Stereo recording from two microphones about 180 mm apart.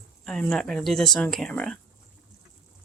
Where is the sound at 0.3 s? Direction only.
5° left (ahead or behind).